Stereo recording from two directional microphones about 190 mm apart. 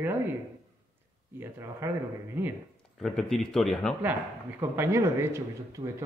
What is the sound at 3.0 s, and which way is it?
Speech, 5° left (ahead or behind).